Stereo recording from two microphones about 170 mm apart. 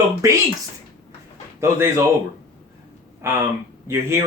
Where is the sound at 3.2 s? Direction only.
15° right (ahead or behind).